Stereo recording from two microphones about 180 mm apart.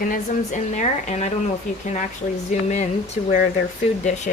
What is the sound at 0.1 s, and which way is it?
A woman's voice, 45° left (ahead or behind).